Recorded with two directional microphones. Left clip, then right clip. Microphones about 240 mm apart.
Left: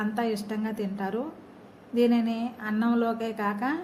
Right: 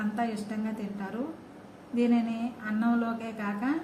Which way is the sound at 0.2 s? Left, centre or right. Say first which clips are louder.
Left 3 dB; left.